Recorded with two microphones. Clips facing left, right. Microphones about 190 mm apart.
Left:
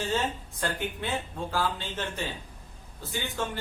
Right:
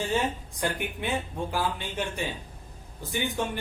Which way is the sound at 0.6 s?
15° right (ahead or behind).